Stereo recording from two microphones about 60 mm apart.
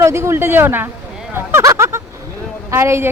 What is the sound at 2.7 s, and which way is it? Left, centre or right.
Speech, right.